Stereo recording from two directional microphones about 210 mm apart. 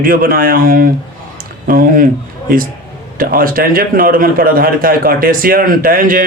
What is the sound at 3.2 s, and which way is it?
A man's voice, 45° right (ahead or behind).